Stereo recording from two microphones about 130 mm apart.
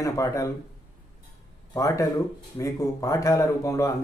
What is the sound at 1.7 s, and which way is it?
Speech, 25° left (ahead or behind).